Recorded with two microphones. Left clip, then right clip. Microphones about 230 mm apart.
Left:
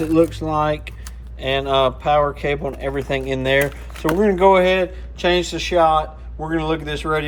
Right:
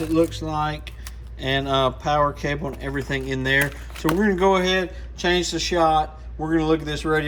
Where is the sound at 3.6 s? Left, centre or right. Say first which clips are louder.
Left 3 dB; centre.